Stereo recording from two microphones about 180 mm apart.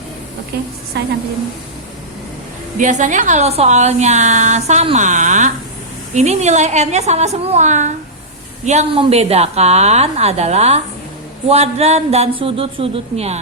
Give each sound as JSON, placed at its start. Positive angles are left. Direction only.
{"t": 0.9, "sound": "a woman's voice", "side_deg": -65}
{"t": 2.7, "sound": "a woman's voice", "side_deg": -45}